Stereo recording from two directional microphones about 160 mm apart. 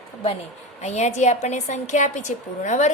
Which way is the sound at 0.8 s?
45° left (ahead or behind).